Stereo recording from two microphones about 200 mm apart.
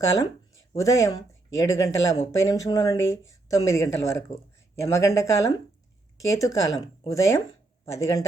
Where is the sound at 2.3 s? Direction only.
15° left (ahead or behind).